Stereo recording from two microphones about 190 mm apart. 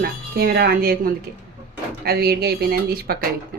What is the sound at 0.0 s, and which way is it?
Speech, 55° right (ahead or behind).